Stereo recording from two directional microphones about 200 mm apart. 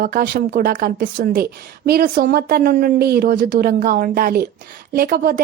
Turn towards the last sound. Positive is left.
turn(degrees=-50)  # may be behind; listen again after turning